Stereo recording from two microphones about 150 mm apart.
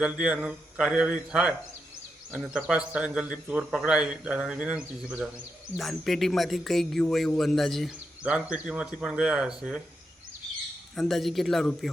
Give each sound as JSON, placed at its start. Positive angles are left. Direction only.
{"t": 0.0, "sound": "a man's voice", "side_deg": -10}
{"t": 10.9, "sound": "speech", "side_deg": 0}